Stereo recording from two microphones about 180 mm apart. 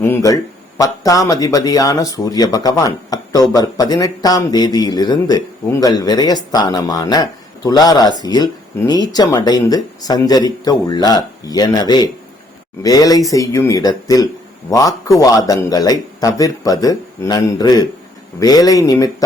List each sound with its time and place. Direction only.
0.0 s speech: 15° left (ahead or behind)